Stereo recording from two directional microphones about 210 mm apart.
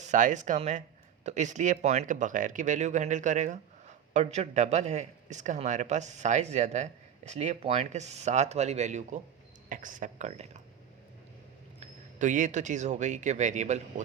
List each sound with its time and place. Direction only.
0.0 s speech: 35° right (ahead or behind)
11.8 s speech: 35° right (ahead or behind)